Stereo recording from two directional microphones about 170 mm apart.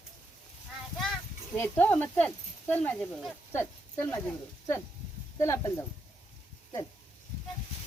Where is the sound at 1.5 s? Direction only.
10° left (ahead or behind).